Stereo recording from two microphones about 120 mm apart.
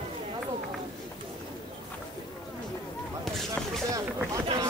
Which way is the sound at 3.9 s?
25° right (ahead or behind).